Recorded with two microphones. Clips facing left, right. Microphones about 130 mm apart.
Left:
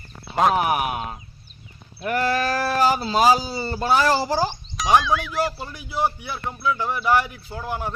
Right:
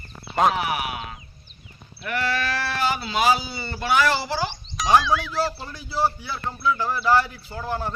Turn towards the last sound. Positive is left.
turn(degrees=10)  # may be behind; listen again after turning